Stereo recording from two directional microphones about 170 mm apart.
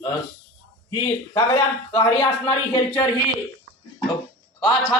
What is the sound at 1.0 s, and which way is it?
Speech, 25° left (ahead or behind).